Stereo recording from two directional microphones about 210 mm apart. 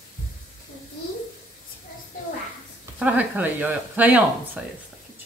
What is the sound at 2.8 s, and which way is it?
Speech, 10° right (ahead or behind).